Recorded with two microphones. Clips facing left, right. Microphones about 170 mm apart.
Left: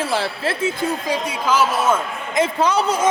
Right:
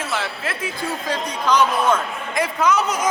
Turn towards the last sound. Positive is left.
turn(degrees=30)  # may be behind; listen again after turning